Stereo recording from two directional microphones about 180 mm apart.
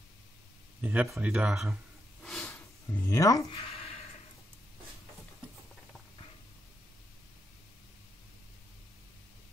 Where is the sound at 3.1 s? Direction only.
20° left (ahead or behind).